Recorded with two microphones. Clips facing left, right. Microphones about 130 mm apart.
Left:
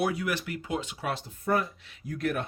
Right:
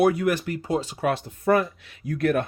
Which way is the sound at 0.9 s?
60° right (ahead or behind).